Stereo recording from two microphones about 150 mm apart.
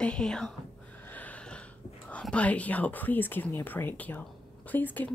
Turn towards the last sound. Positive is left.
turn(degrees=10)  # may be behind; listen again after turning